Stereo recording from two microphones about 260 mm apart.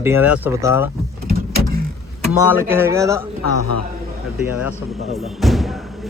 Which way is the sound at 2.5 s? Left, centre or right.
Centre.